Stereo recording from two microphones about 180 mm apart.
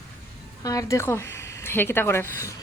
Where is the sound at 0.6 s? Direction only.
20° left (ahead or behind).